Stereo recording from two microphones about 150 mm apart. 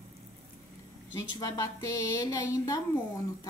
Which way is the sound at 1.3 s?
20° left (ahead or behind).